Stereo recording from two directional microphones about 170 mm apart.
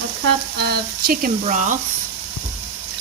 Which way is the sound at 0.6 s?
65° right (ahead or behind).